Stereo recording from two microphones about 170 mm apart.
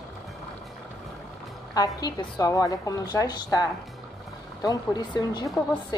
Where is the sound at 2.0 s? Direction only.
25° left (ahead or behind).